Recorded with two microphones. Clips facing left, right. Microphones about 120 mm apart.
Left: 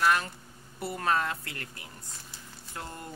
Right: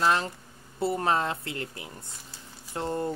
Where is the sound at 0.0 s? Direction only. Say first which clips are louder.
Right 1 dB; 25° right (ahead or behind).